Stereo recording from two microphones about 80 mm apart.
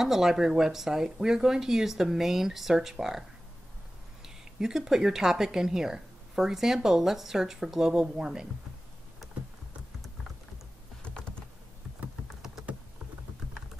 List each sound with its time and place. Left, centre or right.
0.0 s a woman's voice: centre
12.0 s typing: centre